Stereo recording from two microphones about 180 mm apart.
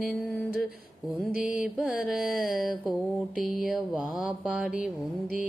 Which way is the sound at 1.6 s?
Centre (ahead or behind).